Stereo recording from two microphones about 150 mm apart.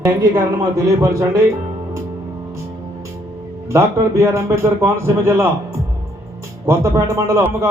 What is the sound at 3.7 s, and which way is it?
A man's voice, 20° right (ahead or behind).